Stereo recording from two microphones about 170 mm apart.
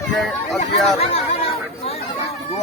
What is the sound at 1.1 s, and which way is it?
Chatter, 35° left (ahead or behind).